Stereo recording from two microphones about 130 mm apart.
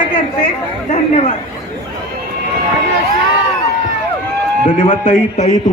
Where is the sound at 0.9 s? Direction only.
60° left (ahead or behind).